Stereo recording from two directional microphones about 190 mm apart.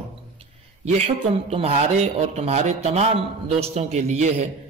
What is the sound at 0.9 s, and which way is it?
Speech, 30° right (ahead or behind).